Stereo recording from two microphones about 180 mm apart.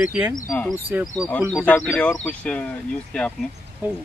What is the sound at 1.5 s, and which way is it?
Speech, 10° left (ahead or behind).